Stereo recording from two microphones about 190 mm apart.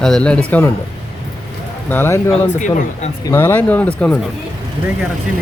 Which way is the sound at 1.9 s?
10° left (ahead or behind).